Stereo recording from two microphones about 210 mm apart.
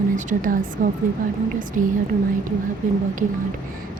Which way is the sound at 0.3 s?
40° right (ahead or behind).